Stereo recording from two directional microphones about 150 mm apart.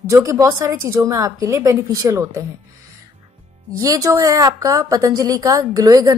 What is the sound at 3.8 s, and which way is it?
A woman's voice, 20° right (ahead or behind).